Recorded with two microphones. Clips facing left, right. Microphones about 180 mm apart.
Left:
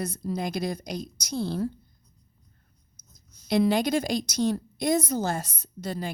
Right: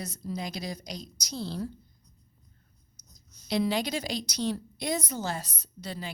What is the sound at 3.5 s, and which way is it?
A woman's voice, 50° left (ahead or behind).